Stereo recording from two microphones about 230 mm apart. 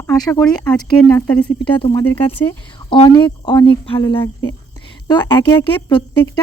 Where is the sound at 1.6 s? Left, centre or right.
Left.